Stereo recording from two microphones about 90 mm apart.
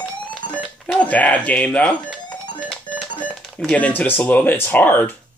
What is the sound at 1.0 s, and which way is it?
Speech, 15° left (ahead or behind).